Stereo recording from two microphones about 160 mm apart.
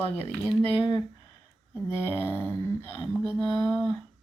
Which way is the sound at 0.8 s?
30° left (ahead or behind).